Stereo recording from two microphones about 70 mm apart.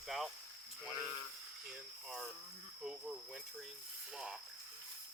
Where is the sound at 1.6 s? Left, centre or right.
Centre.